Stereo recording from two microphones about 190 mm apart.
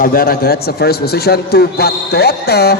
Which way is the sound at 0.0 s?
50° left (ahead or behind).